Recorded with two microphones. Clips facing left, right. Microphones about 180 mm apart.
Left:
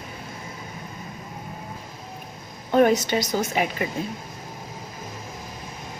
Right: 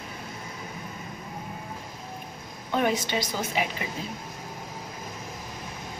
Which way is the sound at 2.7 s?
45° left (ahead or behind).